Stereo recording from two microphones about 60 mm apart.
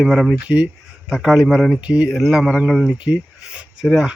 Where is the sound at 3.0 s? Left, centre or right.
Centre.